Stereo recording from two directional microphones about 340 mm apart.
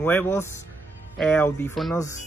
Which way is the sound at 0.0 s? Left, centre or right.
Centre.